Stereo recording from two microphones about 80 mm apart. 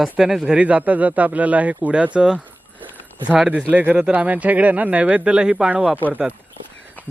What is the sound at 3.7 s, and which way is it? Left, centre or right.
A man's voice, centre.